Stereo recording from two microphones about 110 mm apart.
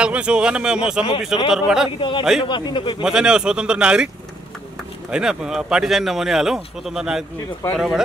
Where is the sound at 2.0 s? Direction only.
50° left (ahead or behind).